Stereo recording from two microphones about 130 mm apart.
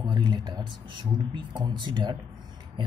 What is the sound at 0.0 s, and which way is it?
Speech, 35° right (ahead or behind).